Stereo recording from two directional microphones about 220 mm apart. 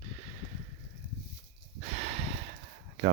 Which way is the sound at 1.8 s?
30° right (ahead or behind).